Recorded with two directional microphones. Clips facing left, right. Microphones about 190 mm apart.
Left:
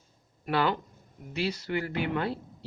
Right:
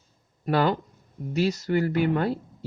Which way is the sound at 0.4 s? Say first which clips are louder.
Right 4 dB; 40° right (ahead or behind).